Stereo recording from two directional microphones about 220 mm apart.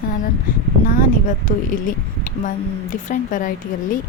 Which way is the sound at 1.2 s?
35° left (ahead or behind).